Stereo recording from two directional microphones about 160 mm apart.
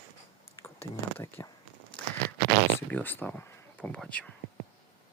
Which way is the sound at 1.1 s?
15° left (ahead or behind).